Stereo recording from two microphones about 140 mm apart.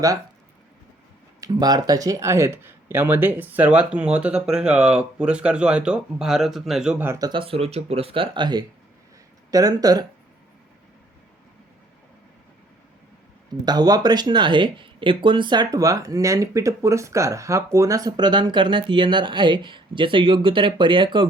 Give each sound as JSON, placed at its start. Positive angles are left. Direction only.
{"t": 1.4, "sound": "speech", "side_deg": -30}
{"t": 7.0, "sound": "speech", "side_deg": -20}
{"t": 7.3, "sound": "speech", "side_deg": -40}
{"t": 13.5, "sound": "speech", "side_deg": -30}